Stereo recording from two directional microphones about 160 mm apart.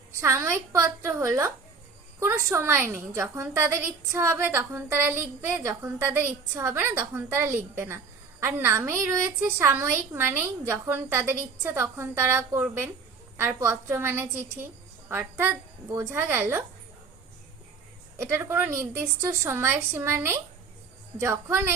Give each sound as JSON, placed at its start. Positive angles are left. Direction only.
{"t": 0.2, "sound": "a woman's voice", "side_deg": -15}
{"t": 18.2, "sound": "a woman's voice", "side_deg": -15}